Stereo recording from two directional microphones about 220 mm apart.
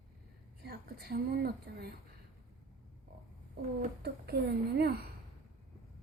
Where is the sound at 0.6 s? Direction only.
45° right (ahead or behind).